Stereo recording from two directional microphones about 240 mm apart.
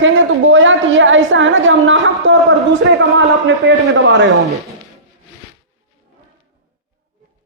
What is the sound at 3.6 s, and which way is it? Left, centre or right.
Speech, right.